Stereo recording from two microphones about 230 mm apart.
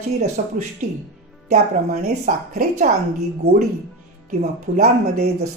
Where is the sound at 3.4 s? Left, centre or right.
Right.